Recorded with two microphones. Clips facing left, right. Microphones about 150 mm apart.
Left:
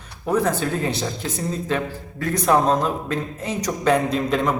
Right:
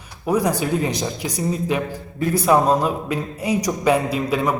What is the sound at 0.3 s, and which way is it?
Speech, 10° right (ahead or behind).